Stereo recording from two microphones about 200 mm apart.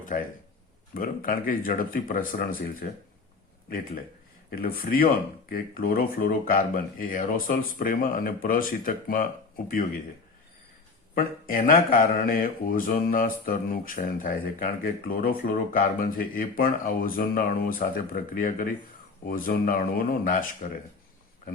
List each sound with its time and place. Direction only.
0.0 s speech: 40° left (ahead or behind)
4.5 s speech: 45° left (ahead or behind)
11.1 s speech: 45° left (ahead or behind)